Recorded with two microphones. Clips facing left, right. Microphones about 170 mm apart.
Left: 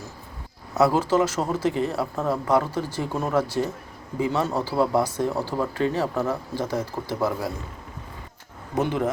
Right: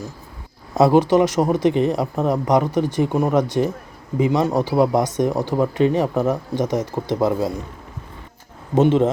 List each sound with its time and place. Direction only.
0.7 s a sound: 20° right (ahead or behind)
1.1 s speech: 15° right (ahead or behind)
8.7 s speech: 25° right (ahead or behind)